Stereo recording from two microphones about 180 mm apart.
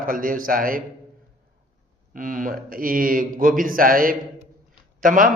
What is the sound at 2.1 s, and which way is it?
Speech, 45° right (ahead or behind).